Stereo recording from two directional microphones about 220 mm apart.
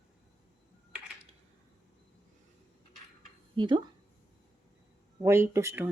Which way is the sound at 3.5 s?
20° right (ahead or behind).